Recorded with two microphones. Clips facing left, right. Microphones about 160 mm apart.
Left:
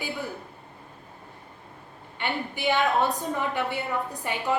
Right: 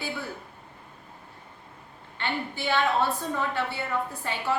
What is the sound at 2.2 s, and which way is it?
Speech, 15° left (ahead or behind).